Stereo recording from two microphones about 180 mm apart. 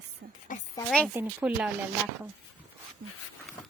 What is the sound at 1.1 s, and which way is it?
Speech, 10° right (ahead or behind).